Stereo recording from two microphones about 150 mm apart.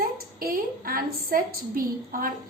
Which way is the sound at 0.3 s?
75° right (ahead or behind).